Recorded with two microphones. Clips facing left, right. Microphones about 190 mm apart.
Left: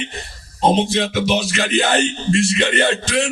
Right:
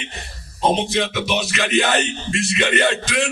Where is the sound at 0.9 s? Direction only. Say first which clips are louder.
Left 3 dB; 30° left (ahead or behind).